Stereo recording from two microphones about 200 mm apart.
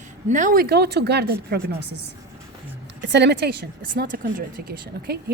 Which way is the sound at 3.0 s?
60° right (ahead or behind).